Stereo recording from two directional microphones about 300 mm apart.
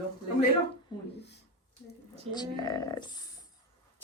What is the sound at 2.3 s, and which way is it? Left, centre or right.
Speech, centre.